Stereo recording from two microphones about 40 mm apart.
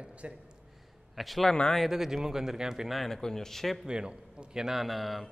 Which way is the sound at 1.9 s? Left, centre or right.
Centre.